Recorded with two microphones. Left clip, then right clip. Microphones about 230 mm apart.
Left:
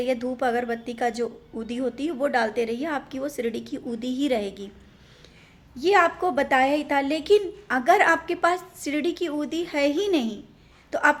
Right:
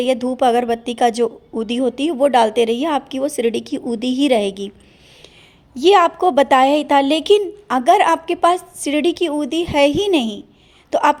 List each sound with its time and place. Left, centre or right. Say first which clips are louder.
0.0 s a woman's voice: right 9 dB; right
5.7 s a woman's voice: right 7 dB; right